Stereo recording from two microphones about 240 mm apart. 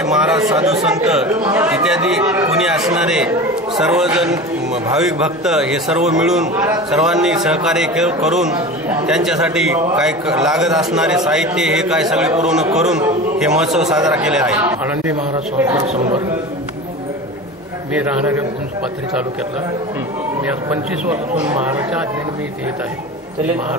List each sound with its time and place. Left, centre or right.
0.0 s a sound: centre
0.4 s speech: centre
1.0 s a man's voice: centre
15.8 s speech: right
17.9 s a man's voice: centre
20.7 s speech: centre